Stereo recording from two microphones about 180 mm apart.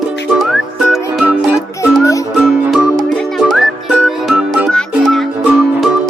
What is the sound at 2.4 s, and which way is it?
Music, 5° right (ahead or behind).